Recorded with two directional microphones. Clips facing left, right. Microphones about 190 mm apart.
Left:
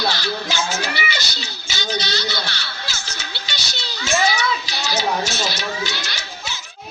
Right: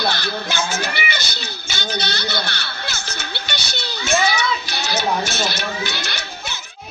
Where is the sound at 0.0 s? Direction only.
55° right (ahead or behind).